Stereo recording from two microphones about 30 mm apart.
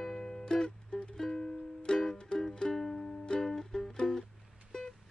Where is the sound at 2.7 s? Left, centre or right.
Centre.